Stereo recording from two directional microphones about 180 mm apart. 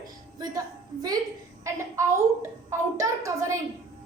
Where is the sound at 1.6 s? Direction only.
15° right (ahead or behind).